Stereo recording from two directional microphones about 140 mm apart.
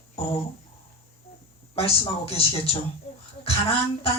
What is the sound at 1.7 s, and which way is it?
Speech, 45° left (ahead or behind).